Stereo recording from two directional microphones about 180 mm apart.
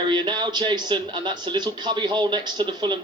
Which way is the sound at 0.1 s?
25° right (ahead or behind).